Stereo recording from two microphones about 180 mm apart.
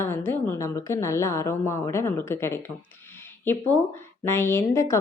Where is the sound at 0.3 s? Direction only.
15° left (ahead or behind).